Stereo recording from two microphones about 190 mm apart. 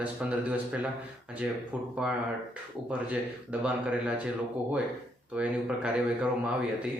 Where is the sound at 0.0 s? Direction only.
5° right (ahead or behind).